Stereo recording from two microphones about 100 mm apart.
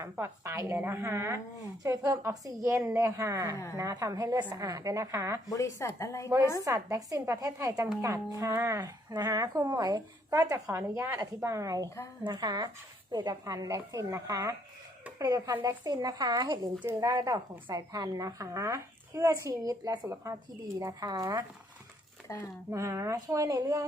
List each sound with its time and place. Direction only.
0.0 s a woman's voice: 30° right (ahead or behind)
5.5 s a woman's voice: 35° left (ahead or behind)
6.7 s a woman's voice: 35° right (ahead or behind)
10.8 s a woman's voice: 25° right (ahead or behind)
22.3 s a woman's voice: 35° left (ahead or behind)
22.7 s a woman's voice: 30° right (ahead or behind)